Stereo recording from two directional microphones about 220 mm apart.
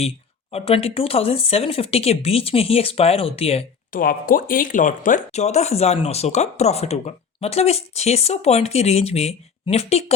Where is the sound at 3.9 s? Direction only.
40° left (ahead or behind).